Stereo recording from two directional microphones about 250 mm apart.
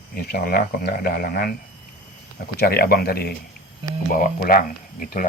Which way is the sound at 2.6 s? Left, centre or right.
Left.